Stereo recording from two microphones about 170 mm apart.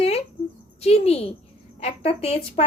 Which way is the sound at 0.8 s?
35° left (ahead or behind).